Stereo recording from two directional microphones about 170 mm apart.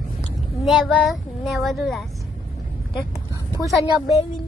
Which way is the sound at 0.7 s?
5° left (ahead or behind).